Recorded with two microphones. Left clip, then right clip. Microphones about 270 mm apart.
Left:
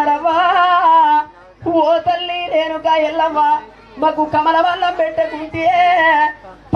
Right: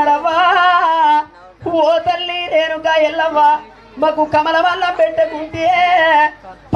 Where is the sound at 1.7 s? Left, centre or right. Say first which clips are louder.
Even; right.